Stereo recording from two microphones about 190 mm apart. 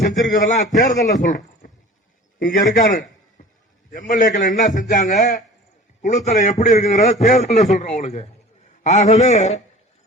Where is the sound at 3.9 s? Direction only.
45° left (ahead or behind).